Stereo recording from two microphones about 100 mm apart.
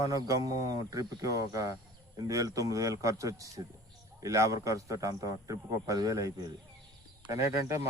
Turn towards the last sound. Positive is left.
turn(degrees=-30)  # may be behind; listen again after turning